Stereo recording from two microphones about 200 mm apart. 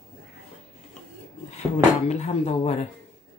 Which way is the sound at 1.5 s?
35° left (ahead or behind).